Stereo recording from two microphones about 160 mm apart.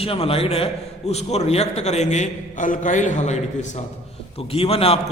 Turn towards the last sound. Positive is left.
turn(degrees=40)  # may be behind; listen again after turning